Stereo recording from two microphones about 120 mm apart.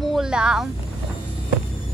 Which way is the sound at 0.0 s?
Centre (ahead or behind).